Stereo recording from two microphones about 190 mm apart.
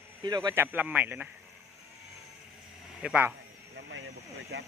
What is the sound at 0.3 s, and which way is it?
Speech, 20° right (ahead or behind).